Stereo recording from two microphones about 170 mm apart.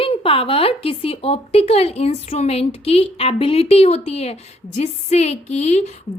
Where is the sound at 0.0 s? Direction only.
35° left (ahead or behind).